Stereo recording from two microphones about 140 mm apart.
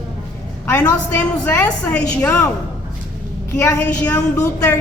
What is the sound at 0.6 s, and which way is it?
A woman's voice, 15° left (ahead or behind).